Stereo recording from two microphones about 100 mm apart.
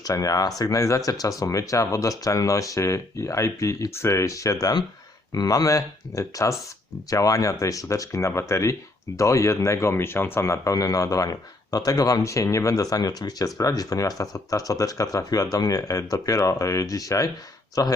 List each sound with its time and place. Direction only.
0.0 s speech: 35° left (ahead or behind)